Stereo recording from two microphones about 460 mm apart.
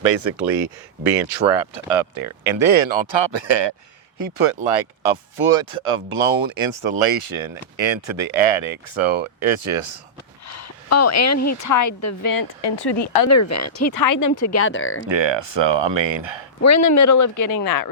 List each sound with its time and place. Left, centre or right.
1.9 s speech: right
4.2 s speech: right
10.5 s a sound: left
11.4 s speech: left
13.2 s speech: left
15.0 s speech: right
16.6 s speech: left